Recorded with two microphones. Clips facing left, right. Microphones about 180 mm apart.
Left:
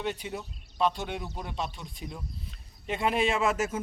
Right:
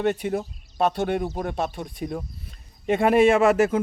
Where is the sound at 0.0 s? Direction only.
60° right (ahead or behind).